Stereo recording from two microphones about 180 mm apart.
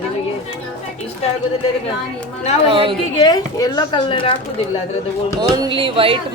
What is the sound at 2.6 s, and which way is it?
Speech, 30° right (ahead or behind).